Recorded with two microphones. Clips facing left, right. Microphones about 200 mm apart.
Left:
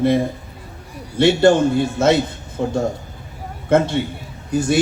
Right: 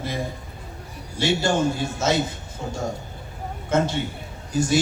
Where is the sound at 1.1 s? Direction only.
60° left (ahead or behind).